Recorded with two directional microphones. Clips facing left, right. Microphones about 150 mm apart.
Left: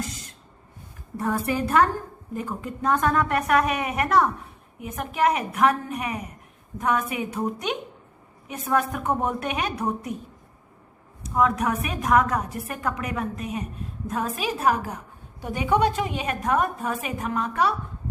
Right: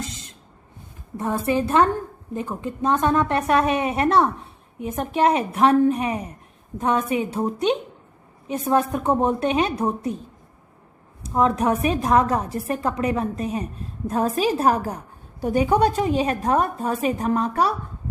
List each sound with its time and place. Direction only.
0.0 s a sound: 20° right (ahead or behind)
1.1 s a woman's voice: 20° right (ahead or behind)
11.2 s a woman's voice: 30° right (ahead or behind)